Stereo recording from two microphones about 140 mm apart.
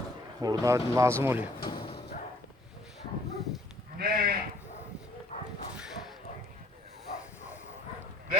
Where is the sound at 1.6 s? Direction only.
40° left (ahead or behind).